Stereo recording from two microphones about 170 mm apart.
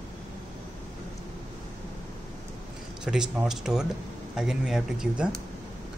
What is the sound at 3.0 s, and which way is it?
Speech, 5° right (ahead or behind).